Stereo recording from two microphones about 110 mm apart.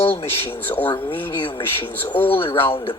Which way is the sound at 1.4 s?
50° left (ahead or behind).